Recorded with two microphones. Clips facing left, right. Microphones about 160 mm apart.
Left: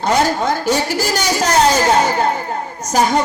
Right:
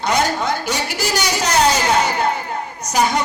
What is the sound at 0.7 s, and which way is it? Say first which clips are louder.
Speech: left 4 dB; 45° left (ahead or behind).